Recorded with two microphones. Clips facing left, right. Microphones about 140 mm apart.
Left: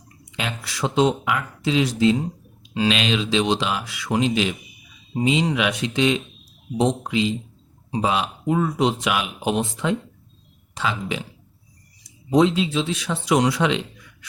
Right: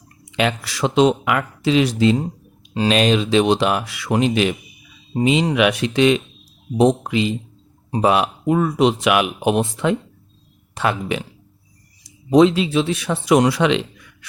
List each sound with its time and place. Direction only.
0.3 s speech: 75° right (ahead or behind)
2.7 s speech: 45° right (ahead or behind); by 11.2 s 60° right (ahead or behind)
12.0 s speech: 75° right (ahead or behind)